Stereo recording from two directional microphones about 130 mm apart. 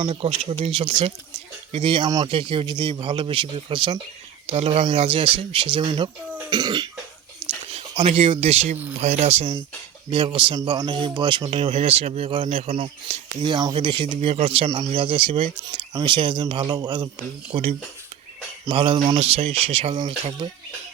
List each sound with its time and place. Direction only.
0.0 s speech: 45° right (ahead or behind)
2.0 s speech: 30° right (ahead or behind)
2.3 s speech: 40° right (ahead or behind)
7.7 s a sound: 50° right (ahead or behind)
8.1 s speech: 50° right (ahead or behind)
10.1 s speech: 40° right (ahead or behind)
10.6 s speech: 30° right (ahead or behind)
15.6 s speech: 30° right (ahead or behind)
17.5 s speech: 50° right (ahead or behind); by 19.3 s 35° right (ahead or behind)
19.3 s speech: 50° right (ahead or behind)